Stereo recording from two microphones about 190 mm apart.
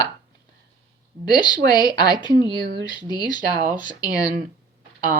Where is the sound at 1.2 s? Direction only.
20° left (ahead or behind).